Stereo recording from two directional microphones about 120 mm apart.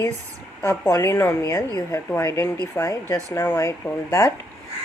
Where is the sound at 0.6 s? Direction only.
20° left (ahead or behind).